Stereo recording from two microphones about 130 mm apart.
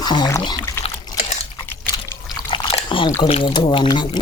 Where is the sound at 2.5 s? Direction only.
40° left (ahead or behind).